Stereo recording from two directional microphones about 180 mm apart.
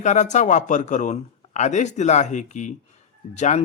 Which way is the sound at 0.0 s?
40° left (ahead or behind).